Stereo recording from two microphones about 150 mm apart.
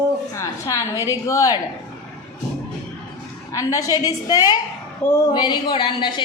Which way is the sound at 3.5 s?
25° left (ahead or behind).